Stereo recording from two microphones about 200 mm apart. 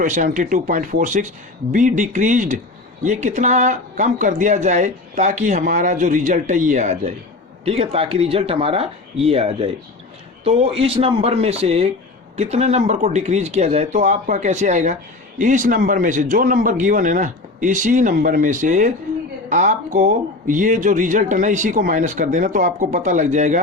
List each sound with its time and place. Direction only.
0.0 s speech: 40° right (ahead or behind)